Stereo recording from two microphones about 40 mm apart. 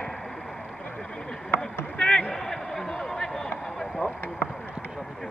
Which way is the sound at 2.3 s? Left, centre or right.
Centre.